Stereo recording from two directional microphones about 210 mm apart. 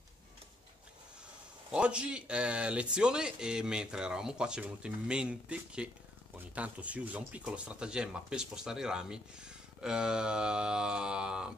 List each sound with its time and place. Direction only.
1.7 s speech: 5° right (ahead or behind)